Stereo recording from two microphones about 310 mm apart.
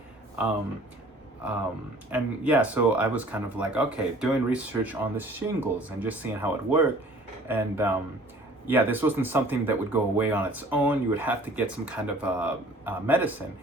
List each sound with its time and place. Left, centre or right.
2.1 s speech: centre